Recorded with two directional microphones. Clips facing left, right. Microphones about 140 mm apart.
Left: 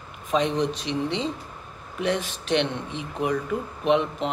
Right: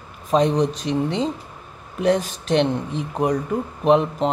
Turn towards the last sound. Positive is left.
turn(degrees=-40)  # may be behind; listen again after turning